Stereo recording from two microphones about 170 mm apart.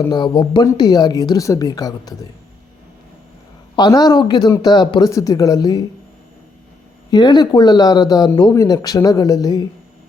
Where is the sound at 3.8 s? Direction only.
25° left (ahead or behind).